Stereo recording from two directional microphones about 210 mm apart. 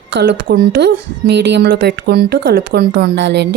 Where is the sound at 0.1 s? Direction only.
60° right (ahead or behind).